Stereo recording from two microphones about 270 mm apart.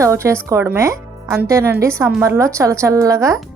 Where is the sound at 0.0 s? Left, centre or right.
Centre.